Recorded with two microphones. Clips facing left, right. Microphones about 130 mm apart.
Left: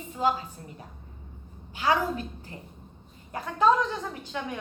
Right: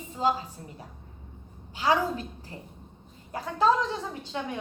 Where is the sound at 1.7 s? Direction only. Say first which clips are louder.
Even; 30° right (ahead or behind).